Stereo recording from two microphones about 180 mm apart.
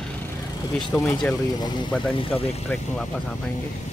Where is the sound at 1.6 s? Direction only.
25° left (ahead or behind).